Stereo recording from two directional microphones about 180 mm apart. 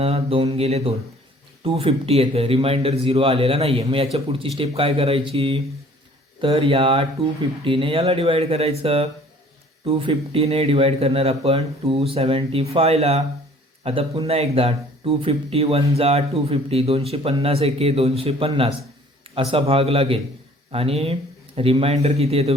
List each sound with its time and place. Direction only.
0.0 s speech: 30° right (ahead or behind)